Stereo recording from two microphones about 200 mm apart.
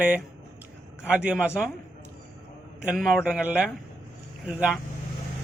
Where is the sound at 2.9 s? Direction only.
Centre (ahead or behind).